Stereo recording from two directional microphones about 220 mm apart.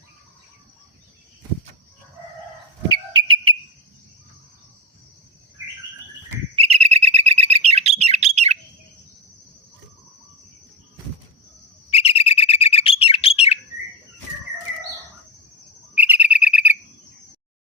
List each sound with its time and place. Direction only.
3.1 s whistle: 20° right (ahead or behind)
6.6 s bird: 30° right (ahead or behind)
11.9 s bird: 25° left (ahead or behind)
16.0 s bird: 5° right (ahead or behind)